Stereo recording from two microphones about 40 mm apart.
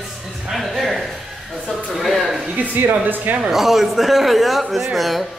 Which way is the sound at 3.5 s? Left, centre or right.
Centre.